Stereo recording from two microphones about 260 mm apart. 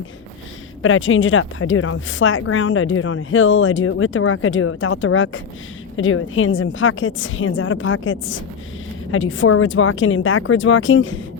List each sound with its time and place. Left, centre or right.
0.8 s speech: left